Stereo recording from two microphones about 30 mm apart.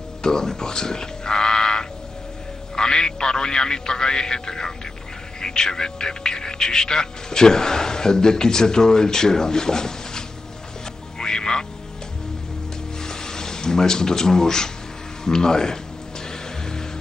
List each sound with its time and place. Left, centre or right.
0.2 s speech: left
11.1 s music: left
13.0 s a sound: left
15.2 s speech: left
16.3 s music: left